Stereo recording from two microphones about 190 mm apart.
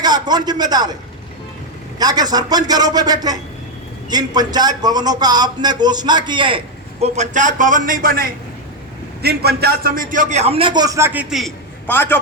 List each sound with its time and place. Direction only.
0.0 s a man's voice: 20° right (ahead or behind)
2.0 s a man's voice: 20° right (ahead or behind)
7.0 s a man's voice: 40° right (ahead or behind); by 11.5 s centre (ahead or behind)
11.9 s a man's voice: 10° left (ahead or behind)